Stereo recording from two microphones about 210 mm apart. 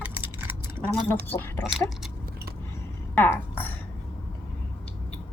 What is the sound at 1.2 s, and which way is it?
Speech, 10° left (ahead or behind).